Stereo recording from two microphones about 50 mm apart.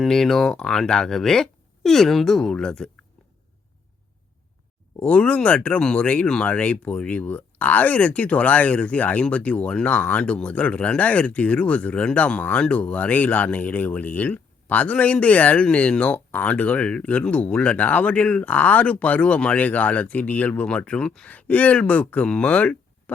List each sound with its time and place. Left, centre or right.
0.0 s speech: centre
4.9 s speech: left